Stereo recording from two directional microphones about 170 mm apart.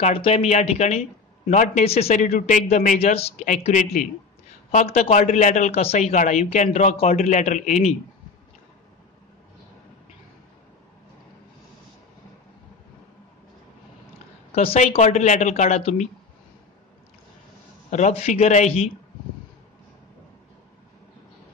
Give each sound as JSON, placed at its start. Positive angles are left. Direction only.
{"t": 0.0, "sound": "speech", "side_deg": 35}
{"t": 14.5, "sound": "speech", "side_deg": 35}
{"t": 17.8, "sound": "speech", "side_deg": 45}